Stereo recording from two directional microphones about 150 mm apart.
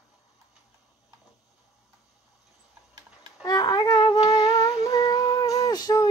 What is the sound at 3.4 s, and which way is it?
Music, 25° left (ahead or behind).